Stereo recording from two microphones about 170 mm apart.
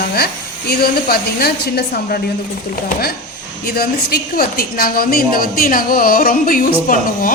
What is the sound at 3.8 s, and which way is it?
A woman's voice, 60° left (ahead or behind).